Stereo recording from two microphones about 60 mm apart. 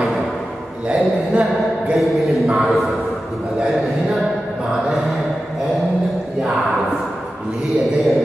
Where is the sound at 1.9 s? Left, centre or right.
Centre.